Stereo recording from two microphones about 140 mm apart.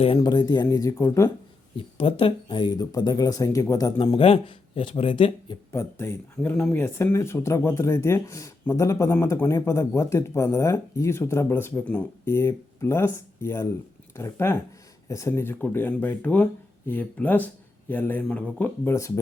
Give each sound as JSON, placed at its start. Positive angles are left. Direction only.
{"t": 0.2, "sound": "speech", "side_deg": 30}
{"t": 2.0, "sound": "speech", "side_deg": 40}
{"t": 4.2, "sound": "speech", "side_deg": 40}
{"t": 5.7, "sound": "speech", "side_deg": 20}
{"t": 6.8, "sound": "speech", "side_deg": 20}